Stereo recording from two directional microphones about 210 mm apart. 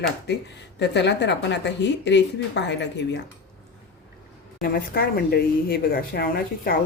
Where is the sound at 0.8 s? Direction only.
55° left (ahead or behind).